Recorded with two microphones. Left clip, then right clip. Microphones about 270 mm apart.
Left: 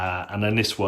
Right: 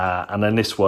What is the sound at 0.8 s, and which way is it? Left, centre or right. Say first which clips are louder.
Speech: right 11 dB; right.